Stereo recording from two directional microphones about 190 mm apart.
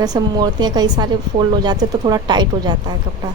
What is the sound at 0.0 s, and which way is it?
A woman's voice, 20° right (ahead or behind).